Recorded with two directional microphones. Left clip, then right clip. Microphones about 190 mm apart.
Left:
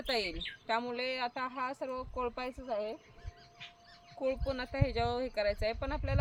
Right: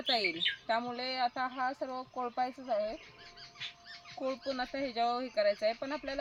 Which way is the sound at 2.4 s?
35° left (ahead or behind).